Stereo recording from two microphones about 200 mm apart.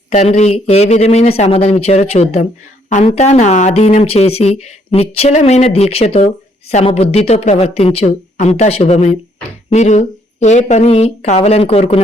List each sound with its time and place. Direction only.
0.1 s speech: 35° left (ahead or behind)